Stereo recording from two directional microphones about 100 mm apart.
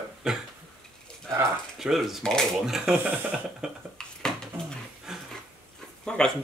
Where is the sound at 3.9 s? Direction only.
5° left (ahead or behind).